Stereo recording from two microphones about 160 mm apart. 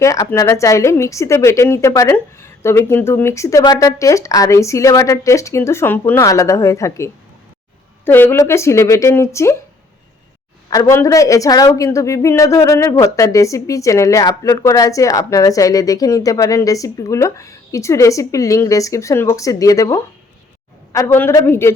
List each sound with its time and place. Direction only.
0.0 s a woman's voice: 20° left (ahead or behind)
10.7 s a woman's voice: 20° left (ahead or behind)